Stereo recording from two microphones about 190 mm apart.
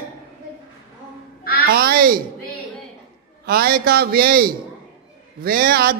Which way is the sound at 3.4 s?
55° right (ahead or behind).